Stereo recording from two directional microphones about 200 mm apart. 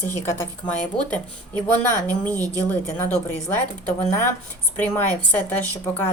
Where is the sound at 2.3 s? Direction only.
15° right (ahead or behind).